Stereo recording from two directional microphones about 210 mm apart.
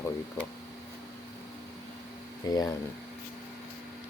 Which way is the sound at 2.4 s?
20° left (ahead or behind).